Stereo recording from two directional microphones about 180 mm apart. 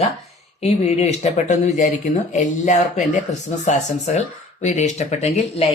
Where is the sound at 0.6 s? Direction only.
35° left (ahead or behind).